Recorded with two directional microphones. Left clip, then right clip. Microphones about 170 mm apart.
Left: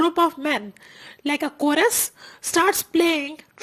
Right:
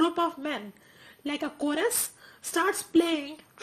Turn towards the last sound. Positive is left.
turn(degrees=25)  # may be behind; listen again after turning